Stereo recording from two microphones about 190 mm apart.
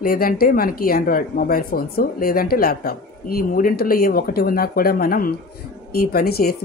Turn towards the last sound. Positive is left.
turn(degrees=50)  # may be behind; listen again after turning